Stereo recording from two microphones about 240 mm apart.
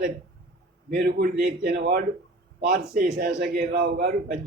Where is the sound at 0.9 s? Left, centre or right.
Right.